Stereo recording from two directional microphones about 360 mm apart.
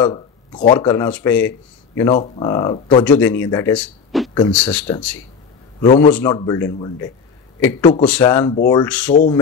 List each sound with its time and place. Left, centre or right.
0.0 s a man's voice: centre
9.1 s speech: centre